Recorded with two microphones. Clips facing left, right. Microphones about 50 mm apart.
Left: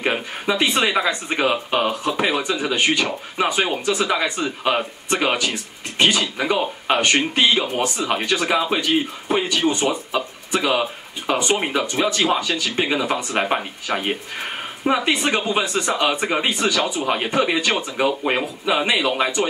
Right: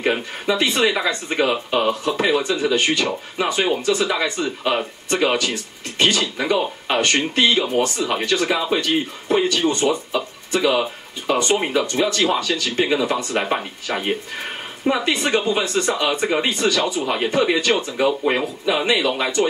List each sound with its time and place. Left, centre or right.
0.0 s speech: centre